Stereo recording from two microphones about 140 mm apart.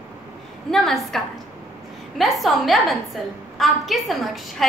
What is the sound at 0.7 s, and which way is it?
A woman's voice, centre (ahead or behind).